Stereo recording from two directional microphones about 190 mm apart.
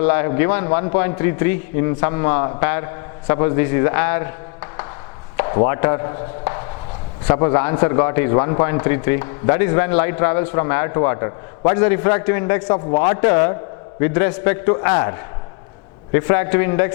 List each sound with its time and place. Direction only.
0.0 s a man's voice: 15° left (ahead or behind)